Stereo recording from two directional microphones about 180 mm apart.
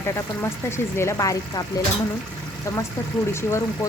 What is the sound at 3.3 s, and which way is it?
Speech, 15° left (ahead or behind).